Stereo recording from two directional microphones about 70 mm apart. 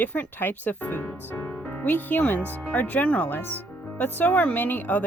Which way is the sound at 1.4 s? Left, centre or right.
Left.